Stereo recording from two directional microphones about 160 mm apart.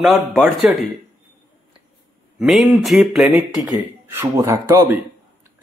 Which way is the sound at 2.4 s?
Centre (ahead or behind).